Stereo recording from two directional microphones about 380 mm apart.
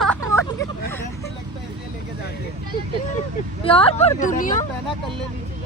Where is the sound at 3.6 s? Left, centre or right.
Centre.